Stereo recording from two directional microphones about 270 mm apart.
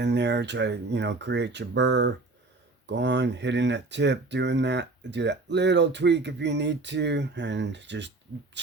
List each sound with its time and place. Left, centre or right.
0.0 s speech: right